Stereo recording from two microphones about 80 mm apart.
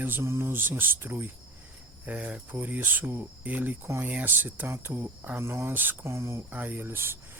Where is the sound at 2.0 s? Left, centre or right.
Centre.